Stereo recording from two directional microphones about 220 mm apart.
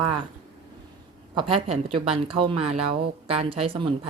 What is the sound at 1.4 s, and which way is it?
Speech, 25° right (ahead or behind).